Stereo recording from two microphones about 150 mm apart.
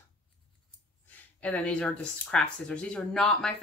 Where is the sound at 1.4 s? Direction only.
10° left (ahead or behind).